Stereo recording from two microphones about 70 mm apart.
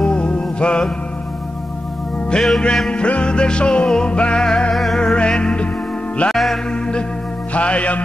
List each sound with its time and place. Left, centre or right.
0.0 s music: centre
2.3 s music: centre
2.6 s music: centre
6.3 s music: centre
6.7 s music: centre